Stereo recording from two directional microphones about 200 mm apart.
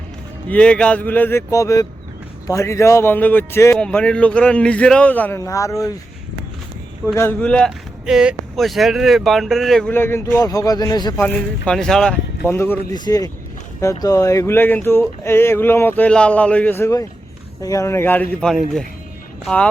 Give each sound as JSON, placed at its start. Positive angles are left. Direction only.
{"t": 0.4, "sound": "speech", "side_deg": 5}
{"t": 7.2, "sound": "speech", "side_deg": 10}
{"t": 11.3, "sound": "speech", "side_deg": 5}